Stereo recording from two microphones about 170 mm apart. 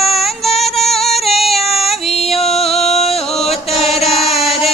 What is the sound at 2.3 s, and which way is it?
Music, centre (ahead or behind).